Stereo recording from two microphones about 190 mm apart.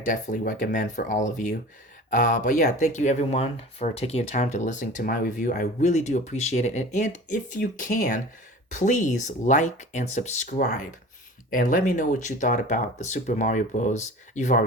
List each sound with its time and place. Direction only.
0.0 s speech: 45° left (ahead or behind)